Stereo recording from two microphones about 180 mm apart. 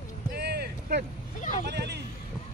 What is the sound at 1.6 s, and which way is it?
Speech, 65° right (ahead or behind).